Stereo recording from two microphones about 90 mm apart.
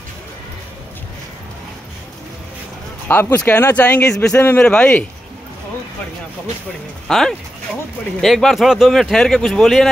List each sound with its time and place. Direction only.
3.1 s speech: 25° left (ahead or behind)
4.2 s speech: 30° left (ahead or behind)
4.6 s speech: 10° left (ahead or behind)
7.1 s speech: 5° left (ahead or behind)